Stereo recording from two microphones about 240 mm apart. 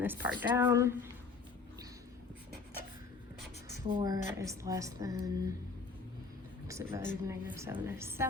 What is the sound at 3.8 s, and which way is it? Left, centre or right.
A woman's voice, centre.